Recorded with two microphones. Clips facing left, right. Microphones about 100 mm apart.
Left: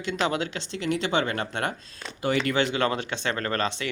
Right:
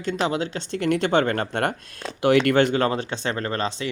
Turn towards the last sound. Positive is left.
turn(degrees=-25)  # may be behind; listen again after turning